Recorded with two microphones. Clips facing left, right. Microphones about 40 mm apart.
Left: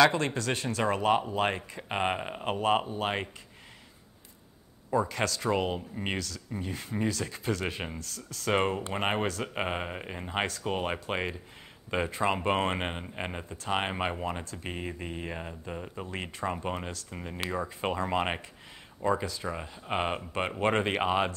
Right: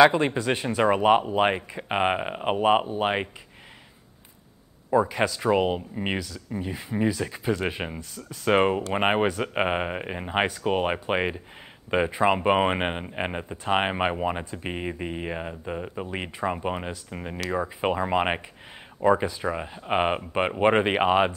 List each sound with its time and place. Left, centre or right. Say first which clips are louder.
0.0 s speech: right 6 dB; centre
4.9 s speech: right 6 dB; centre